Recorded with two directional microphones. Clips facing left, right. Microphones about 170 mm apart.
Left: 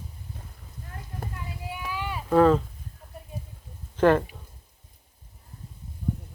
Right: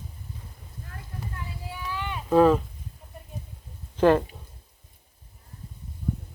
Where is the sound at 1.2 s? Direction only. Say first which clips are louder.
Left 2 dB; 55° left (ahead or behind).